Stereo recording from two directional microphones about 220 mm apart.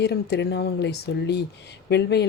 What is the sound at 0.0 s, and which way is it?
Speech, 50° left (ahead or behind).